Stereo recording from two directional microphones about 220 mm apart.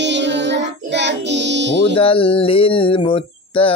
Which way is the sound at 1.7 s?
55° right (ahead or behind).